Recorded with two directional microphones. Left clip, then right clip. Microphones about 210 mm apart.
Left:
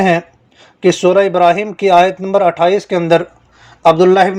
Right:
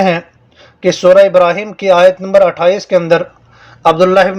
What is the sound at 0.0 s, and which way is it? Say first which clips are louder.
A man's voice: even; 25° left (ahead or behind).